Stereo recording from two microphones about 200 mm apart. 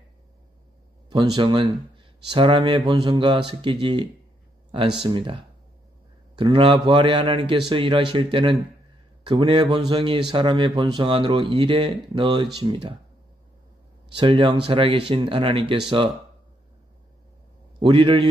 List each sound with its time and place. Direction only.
1.1 s speech: 25° right (ahead or behind)
14.1 s speech: 25° right (ahead or behind)
17.7 s a man's voice: 25° right (ahead or behind)